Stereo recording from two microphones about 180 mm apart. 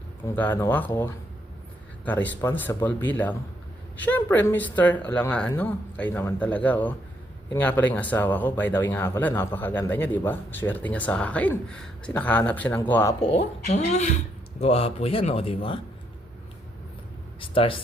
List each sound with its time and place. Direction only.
0.5 s speech: 10° left (ahead or behind)
2.0 s speech: 10° left (ahead or behind)
13.7 s speech: 40° left (ahead or behind)
17.4 s speech: 30° left (ahead or behind)